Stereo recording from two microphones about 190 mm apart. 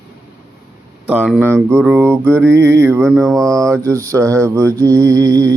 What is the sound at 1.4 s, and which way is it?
Music, 10° right (ahead or behind).